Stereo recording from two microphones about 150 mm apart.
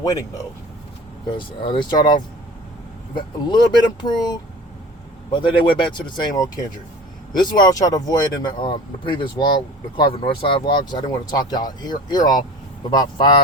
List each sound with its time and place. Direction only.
0.0 s speech: 25° left (ahead or behind)
1.3 s speech: 35° left (ahead or behind)
3.3 s speech: 30° left (ahead or behind)